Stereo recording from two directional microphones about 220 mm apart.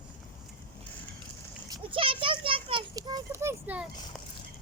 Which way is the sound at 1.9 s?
25° right (ahead or behind).